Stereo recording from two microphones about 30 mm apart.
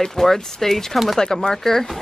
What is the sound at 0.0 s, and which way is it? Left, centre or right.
Speech, centre.